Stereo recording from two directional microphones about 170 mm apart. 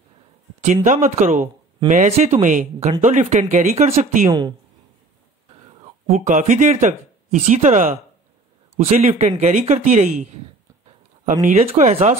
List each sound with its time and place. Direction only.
0.8 s speech: 45° right (ahead or behind)
4.3 s a woman's voice: 20° right (ahead or behind)
6.0 s a man's voice: 50° right (ahead or behind)
11.4 s speech: 45° right (ahead or behind)